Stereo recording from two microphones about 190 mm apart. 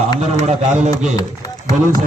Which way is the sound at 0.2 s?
35° right (ahead or behind).